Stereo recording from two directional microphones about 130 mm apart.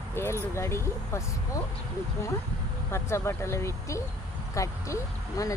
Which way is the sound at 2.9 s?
20° left (ahead or behind).